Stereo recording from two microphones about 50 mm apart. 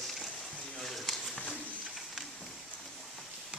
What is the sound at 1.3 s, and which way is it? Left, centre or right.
Pigeon, centre.